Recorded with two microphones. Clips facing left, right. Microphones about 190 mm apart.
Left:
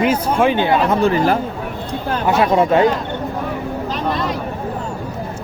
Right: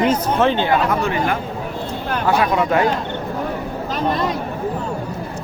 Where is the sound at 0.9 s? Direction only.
35° left (ahead or behind).